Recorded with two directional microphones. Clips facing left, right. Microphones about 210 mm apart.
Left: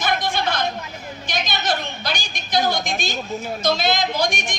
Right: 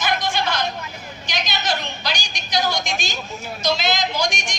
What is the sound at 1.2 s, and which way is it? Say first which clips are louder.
A woman's voice: left 1 dB; 55° left (ahead or behind).